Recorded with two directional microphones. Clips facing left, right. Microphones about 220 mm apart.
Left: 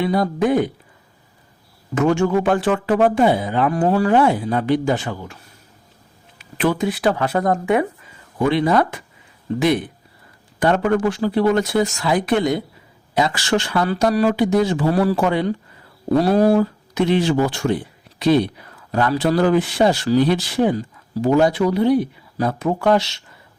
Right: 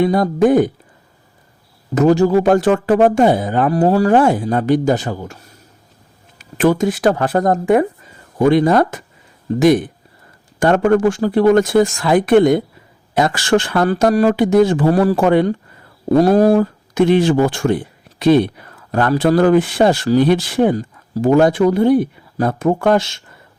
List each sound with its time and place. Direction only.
0.0 s speech: 45° right (ahead or behind)
2.0 s speech: 35° right (ahead or behind)
6.4 s speech: 45° right (ahead or behind)